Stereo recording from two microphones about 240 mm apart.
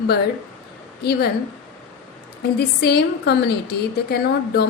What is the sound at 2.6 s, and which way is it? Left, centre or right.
A woman's voice, left.